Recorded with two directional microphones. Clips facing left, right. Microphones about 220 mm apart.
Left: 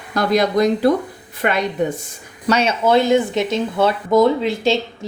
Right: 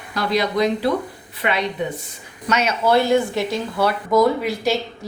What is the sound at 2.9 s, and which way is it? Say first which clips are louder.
Speech: left 2 dB; 20° left (ahead or behind).